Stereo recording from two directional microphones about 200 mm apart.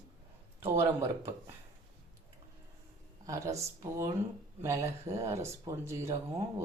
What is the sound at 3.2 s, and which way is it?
Speech, 15° right (ahead or behind).